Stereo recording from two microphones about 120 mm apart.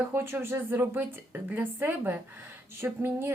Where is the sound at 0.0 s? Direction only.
20° right (ahead or behind).